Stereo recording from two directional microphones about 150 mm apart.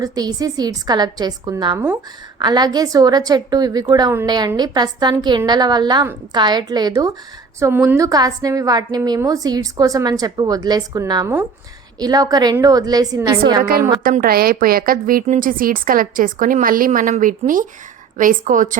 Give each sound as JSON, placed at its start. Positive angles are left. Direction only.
{"t": 0.0, "sound": "a woman's voice", "side_deg": -25}
{"t": 7.6, "sound": "a woman's voice", "side_deg": -15}
{"t": 13.6, "sound": "a woman's voice", "side_deg": -80}